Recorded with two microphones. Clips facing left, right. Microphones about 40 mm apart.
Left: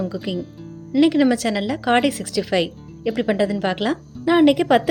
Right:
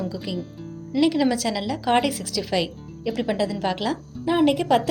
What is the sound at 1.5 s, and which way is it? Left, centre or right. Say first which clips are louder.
A woman's voice: left 3 dB; left.